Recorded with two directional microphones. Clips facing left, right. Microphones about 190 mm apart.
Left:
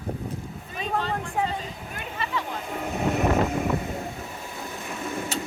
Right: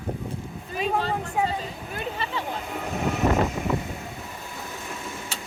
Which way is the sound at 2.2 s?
30° right (ahead or behind).